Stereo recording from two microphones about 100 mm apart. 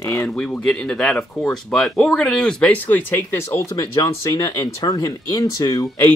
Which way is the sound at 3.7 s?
35° left (ahead or behind).